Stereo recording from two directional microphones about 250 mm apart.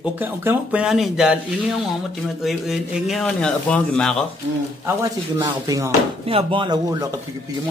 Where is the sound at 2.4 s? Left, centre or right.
Centre.